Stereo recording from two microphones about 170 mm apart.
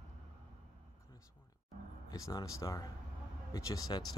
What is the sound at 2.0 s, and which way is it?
Speech, 20° left (ahead or behind).